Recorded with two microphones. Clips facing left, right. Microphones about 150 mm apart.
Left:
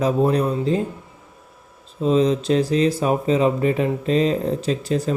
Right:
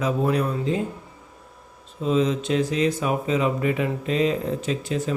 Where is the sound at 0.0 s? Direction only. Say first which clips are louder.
Left 4 dB; 35° left (ahead or behind).